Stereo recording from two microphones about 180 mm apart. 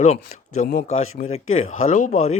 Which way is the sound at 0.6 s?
55° left (ahead or behind).